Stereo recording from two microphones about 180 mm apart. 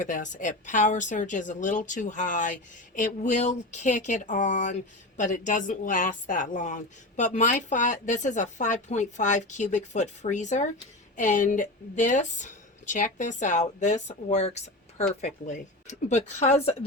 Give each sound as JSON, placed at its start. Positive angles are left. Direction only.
{"t": 0.0, "sound": "speech", "side_deg": 45}